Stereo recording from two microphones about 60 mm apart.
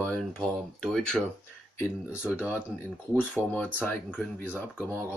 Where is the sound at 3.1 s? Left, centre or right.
Left.